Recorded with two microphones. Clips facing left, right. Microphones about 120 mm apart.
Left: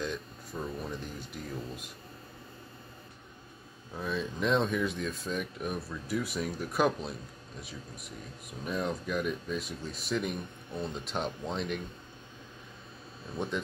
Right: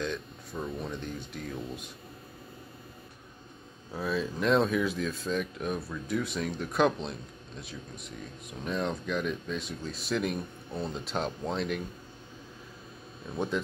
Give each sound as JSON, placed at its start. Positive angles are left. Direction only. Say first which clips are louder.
{"t": 0.0, "sound": "speech", "louder": "right 2 dB", "side_deg": 5}
{"t": 3.9, "sound": "speech", "louder": "right 3 dB", "side_deg": -5}
{"t": 13.3, "sound": "speech", "louder": "right 3 dB", "side_deg": 0}